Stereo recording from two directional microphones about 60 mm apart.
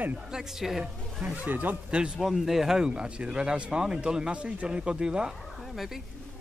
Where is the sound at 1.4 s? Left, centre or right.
Right.